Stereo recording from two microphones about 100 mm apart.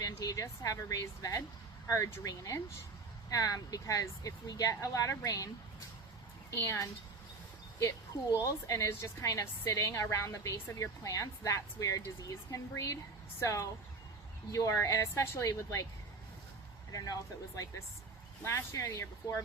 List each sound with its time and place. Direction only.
0.0 s a woman's voice: 35° left (ahead or behind)
6.6 s speech: 30° left (ahead or behind)
8.4 s a woman's voice: 30° left (ahead or behind)
16.9 s a woman's voice: 35° left (ahead or behind)